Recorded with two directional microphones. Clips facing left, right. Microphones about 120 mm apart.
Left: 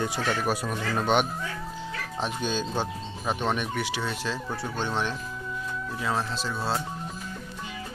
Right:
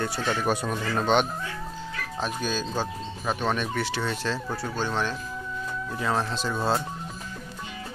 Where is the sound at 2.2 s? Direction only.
25° left (ahead or behind); by 4.4 s 10° left (ahead or behind).